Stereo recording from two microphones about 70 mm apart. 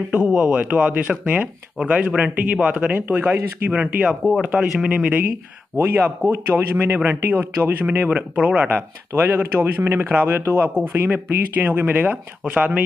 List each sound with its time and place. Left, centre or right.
0.1 s speech: centre
8.6 s speech: right